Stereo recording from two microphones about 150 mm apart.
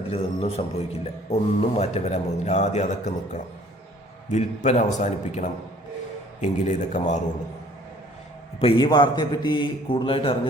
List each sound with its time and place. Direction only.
0.1 s a man's voice: 45° left (ahead or behind)
8.6 s a man's voice: 35° left (ahead or behind)